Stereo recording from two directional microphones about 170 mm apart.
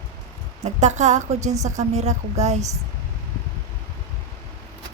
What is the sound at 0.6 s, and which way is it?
Speech, 45° right (ahead or behind).